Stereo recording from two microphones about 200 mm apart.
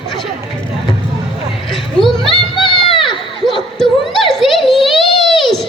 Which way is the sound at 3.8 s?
Centre (ahead or behind).